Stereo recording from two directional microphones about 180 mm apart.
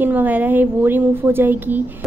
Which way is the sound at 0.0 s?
10° right (ahead or behind).